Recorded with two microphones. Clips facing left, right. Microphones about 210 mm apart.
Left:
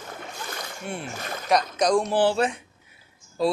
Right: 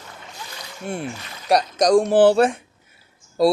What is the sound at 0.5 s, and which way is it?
Rowboat, 50° left (ahead or behind).